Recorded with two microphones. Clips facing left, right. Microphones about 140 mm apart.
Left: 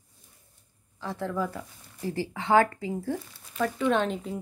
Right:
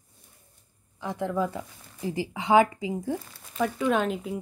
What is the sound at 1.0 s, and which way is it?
Speech, 15° right (ahead or behind).